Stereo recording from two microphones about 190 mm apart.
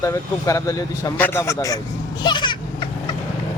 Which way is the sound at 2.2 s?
25° left (ahead or behind).